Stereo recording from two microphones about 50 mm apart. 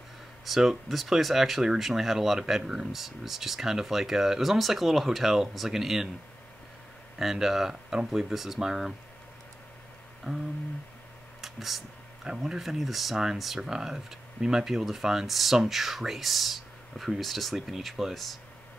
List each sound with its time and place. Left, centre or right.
0.5 s speech: centre
7.2 s speech: centre
10.3 s speech: centre
11.4 s a sound: centre
12.3 s speech: centre